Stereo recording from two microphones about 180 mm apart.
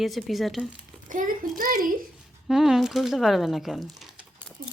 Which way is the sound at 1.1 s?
50° right (ahead or behind).